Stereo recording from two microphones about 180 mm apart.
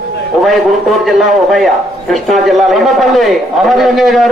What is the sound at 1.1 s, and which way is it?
A man's voice, centre (ahead or behind).